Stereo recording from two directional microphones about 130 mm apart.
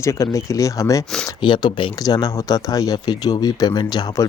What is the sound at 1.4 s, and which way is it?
Speech, 40° left (ahead or behind).